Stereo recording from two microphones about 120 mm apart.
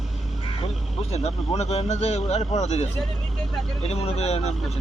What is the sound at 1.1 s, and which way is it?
Speech, 60° left (ahead or behind).